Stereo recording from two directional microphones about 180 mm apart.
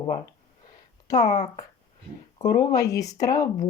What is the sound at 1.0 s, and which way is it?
Speech, 20° left (ahead or behind).